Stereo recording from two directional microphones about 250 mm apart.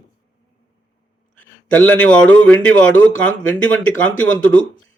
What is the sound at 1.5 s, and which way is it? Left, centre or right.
A man's voice, centre.